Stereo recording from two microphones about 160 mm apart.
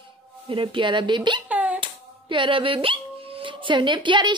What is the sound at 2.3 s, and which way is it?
Speech, 30° right (ahead or behind).